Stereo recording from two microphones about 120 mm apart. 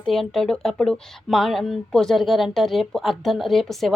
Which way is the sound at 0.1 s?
Centre (ahead or behind).